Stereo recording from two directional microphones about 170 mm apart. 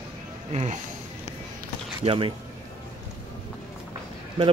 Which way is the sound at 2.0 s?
30° right (ahead or behind).